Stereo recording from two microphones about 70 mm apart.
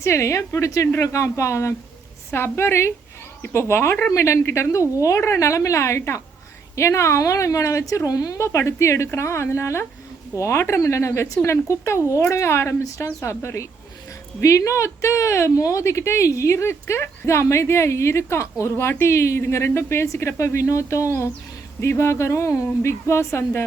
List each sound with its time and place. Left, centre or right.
0.0 s a woman's voice: left
8.4 s a woman's voice: left